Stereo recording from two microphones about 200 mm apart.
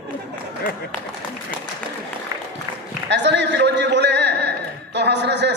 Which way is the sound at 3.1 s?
60° right (ahead or behind).